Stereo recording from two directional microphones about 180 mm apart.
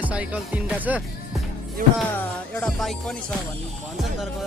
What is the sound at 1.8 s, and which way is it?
Music, 50° right (ahead or behind).